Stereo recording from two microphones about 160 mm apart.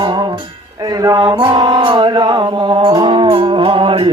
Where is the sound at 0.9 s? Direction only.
25° right (ahead or behind).